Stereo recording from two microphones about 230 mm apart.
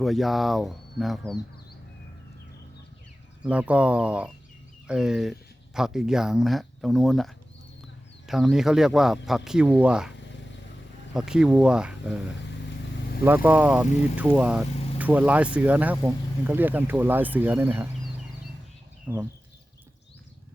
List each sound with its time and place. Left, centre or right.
0.0 s speech: centre
3.5 s speech: centre
11.1 s speech: centre
19.0 s speech: centre